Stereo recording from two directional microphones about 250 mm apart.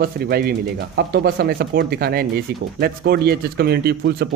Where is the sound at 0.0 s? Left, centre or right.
Right.